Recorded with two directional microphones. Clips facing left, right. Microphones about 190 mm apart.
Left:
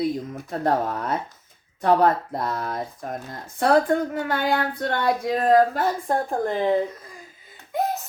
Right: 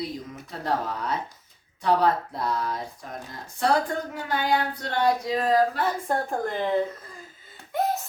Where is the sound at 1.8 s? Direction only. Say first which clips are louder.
Left 4 dB; 50° left (ahead or behind).